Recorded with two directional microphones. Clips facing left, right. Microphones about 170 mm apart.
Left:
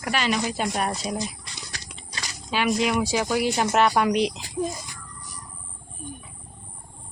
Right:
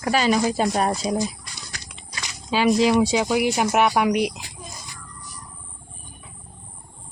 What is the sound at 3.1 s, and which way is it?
A woman's voice, 15° right (ahead or behind).